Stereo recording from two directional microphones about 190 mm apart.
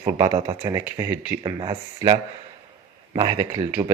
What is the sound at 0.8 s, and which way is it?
Speech, 10° right (ahead or behind).